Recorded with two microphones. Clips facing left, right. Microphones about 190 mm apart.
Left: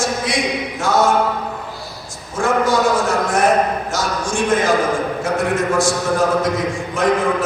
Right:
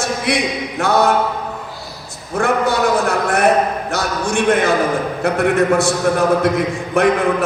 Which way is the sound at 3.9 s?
65° right (ahead or behind).